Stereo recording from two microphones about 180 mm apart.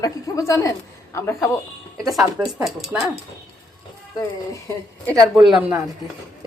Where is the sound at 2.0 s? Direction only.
Centre (ahead or behind).